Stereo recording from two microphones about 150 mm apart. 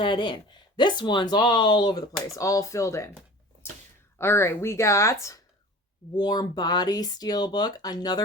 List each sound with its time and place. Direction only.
0.0 s speech: 30° left (ahead or behind)
4.2 s speech: 15° left (ahead or behind)